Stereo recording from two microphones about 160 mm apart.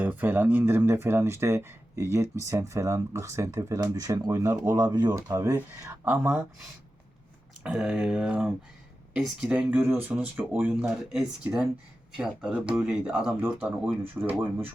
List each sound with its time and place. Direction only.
0.0 s speech: 10° right (ahead or behind)
7.6 s speech: 5° right (ahead or behind)